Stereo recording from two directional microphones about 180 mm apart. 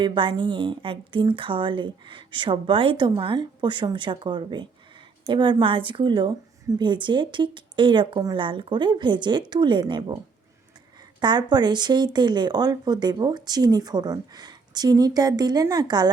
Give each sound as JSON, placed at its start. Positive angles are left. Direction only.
{"t": 0.0, "sound": "a woman's voice", "side_deg": -25}
{"t": 11.2, "sound": "a woman's voice", "side_deg": -25}